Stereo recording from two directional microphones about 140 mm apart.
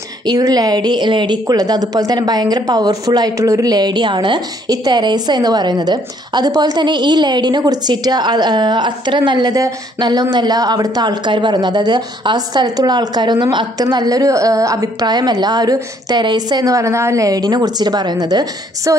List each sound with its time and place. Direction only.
0.2 s a woman's voice: 30° right (ahead or behind)